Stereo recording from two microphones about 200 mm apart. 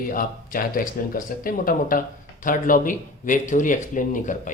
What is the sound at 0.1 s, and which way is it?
Speech, 45° left (ahead or behind).